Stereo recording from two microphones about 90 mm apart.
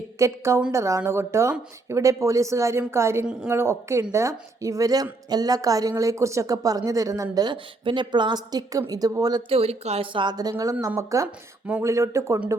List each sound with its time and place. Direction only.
0.2 s a woman's voice: 35° right (ahead or behind)
3.2 s a woman's voice: 10° right (ahead or behind)
3.5 s a woman's voice: 30° right (ahead or behind)
7.3 s a woman's voice: 60° right (ahead or behind)
9.5 s speech: 85° right; by 10.3 s 70° right (ahead or behind)
10.6 s a woman's voice: 40° right (ahead or behind)